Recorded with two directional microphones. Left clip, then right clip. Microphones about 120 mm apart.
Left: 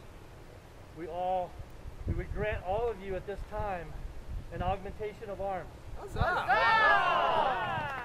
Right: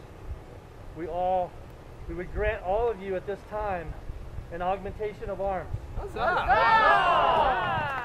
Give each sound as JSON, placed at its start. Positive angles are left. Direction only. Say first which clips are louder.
{"t": 0.9, "sound": "speech", "louder": "right 6 dB", "side_deg": 5}
{"t": 5.9, "sound": "speech", "louder": "right 5 dB", "side_deg": 15}
{"t": 7.4, "sound": "a sound", "louder": "right 6 dB", "side_deg": -10}